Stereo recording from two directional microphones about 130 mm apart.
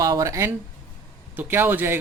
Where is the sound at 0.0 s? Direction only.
25° right (ahead or behind).